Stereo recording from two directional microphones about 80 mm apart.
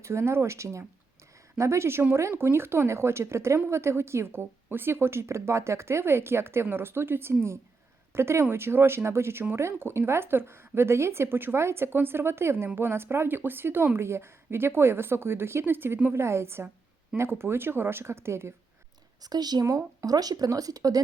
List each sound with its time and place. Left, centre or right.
0.0 s speech: right
19.2 s speech: right
19.6 s speech: right